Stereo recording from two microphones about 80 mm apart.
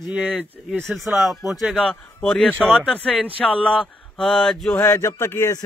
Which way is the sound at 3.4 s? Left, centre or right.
Centre.